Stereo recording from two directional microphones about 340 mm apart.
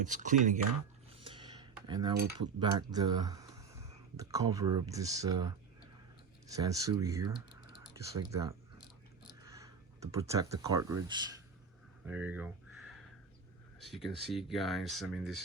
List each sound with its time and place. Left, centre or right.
0.0 s speech: right
1.1 s cutlery: centre
2.4 s speech: centre
12.0 s a sound: centre
13.8 s speech: centre